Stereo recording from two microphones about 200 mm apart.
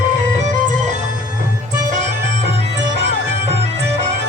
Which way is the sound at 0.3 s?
35° right (ahead or behind).